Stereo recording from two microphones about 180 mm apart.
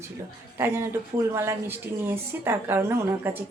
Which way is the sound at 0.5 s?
15° right (ahead or behind).